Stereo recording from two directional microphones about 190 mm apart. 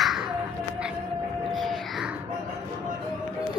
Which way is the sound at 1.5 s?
Centre (ahead or behind).